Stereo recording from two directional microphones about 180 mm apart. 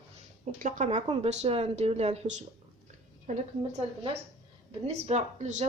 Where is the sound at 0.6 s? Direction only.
40° right (ahead or behind).